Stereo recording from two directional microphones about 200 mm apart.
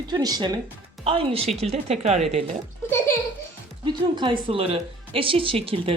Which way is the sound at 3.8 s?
25° right (ahead or behind).